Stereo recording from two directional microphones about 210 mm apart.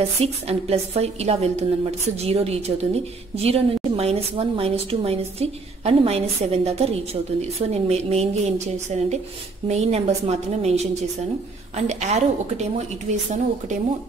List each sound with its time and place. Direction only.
0.2 s a woman's voice: 30° right (ahead or behind)